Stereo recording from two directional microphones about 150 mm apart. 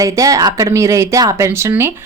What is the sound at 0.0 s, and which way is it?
A woman's voice, 20° right (ahead or behind).